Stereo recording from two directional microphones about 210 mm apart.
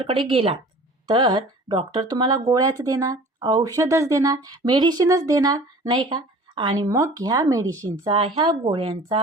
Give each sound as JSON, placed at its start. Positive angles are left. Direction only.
{"t": 0.3, "sound": "speech", "side_deg": -25}